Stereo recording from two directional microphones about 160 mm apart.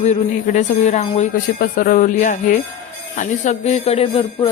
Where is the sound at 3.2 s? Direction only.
50° left (ahead or behind).